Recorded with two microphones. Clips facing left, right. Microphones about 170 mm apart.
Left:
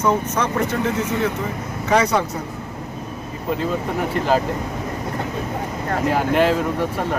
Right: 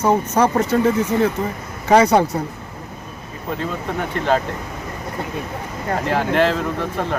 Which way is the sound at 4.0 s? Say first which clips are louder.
Right 1 dB; 5° left (ahead or behind).